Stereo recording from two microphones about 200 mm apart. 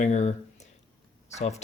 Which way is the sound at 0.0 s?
35° left (ahead or behind).